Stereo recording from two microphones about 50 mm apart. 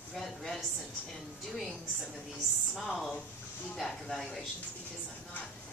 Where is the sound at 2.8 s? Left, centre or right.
Centre.